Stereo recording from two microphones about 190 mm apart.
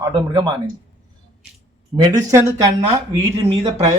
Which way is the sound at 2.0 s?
20° right (ahead or behind).